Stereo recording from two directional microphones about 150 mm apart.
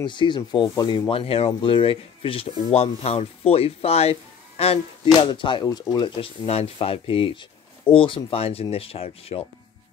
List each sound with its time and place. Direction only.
0.0 s speech: 30° left (ahead or behind)